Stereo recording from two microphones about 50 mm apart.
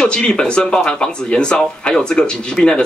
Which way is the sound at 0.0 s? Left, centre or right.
Centre.